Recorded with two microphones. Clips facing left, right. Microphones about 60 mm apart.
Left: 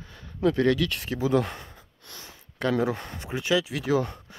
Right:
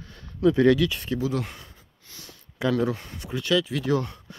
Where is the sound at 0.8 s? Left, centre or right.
Centre.